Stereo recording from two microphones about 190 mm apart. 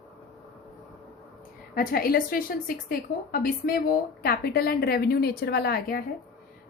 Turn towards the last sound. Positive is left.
turn(degrees=55)  # may be behind; listen again after turning